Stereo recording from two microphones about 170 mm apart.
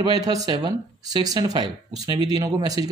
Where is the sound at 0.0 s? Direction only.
25° right (ahead or behind).